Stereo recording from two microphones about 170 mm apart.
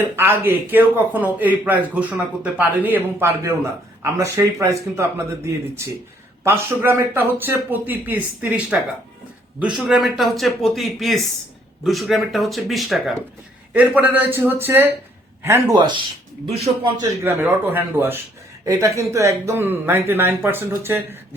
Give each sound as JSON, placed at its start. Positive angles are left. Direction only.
{"t": 0.2, "sound": "a man's voice", "side_deg": -10}
{"t": 6.4, "sound": "a man's voice", "side_deg": -15}
{"t": 17.2, "sound": "a man's voice", "side_deg": -10}